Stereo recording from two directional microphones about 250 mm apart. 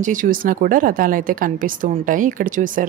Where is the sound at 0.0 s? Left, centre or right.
Right.